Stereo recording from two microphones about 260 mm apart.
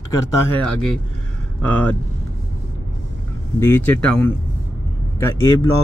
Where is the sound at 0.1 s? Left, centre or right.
Centre.